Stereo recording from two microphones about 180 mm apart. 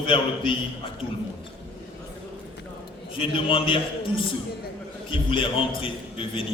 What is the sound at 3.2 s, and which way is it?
A man's voice, 30° left (ahead or behind).